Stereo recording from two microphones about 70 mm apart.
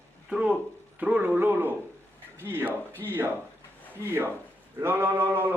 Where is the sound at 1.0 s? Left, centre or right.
Right.